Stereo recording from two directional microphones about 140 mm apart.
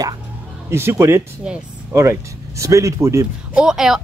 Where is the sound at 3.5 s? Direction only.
5° right (ahead or behind).